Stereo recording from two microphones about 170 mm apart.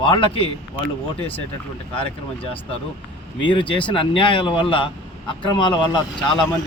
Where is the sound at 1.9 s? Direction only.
35° left (ahead or behind).